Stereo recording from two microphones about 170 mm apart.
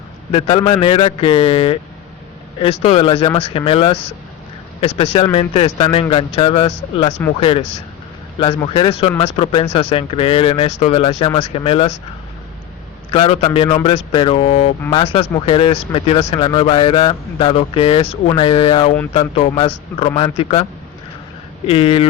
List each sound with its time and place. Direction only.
0.3 s speech: 30° left (ahead or behind)
13.1 s speech: 35° left (ahead or behind)
21.7 s speech: 35° left (ahead or behind)